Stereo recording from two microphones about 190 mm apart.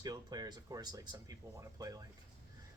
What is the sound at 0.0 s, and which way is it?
Speech, 20° right (ahead or behind).